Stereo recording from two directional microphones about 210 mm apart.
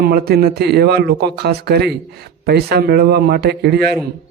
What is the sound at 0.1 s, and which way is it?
A man's voice, 50° right (ahead or behind).